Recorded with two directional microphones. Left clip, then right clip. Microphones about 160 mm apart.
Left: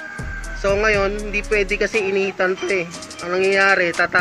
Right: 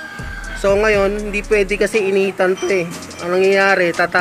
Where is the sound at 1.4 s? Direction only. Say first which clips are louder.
Right 3 dB; 25° right (ahead or behind).